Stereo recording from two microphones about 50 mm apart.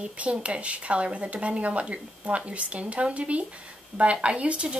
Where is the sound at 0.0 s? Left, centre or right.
Right.